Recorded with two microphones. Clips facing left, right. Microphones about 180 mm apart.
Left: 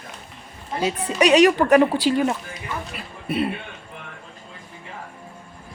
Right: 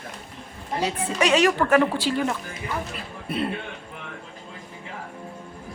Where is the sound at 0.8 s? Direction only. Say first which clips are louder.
Left 4 dB; 15° left (ahead or behind).